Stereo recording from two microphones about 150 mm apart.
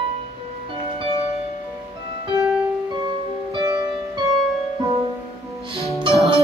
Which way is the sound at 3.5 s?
30° right (ahead or behind).